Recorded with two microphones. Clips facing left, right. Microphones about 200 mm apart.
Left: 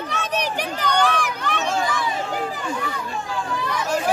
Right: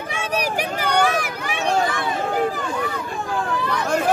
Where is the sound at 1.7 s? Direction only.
60° right (ahead or behind).